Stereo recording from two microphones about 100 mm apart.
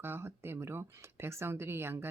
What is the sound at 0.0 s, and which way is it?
Speech, 25° right (ahead or behind).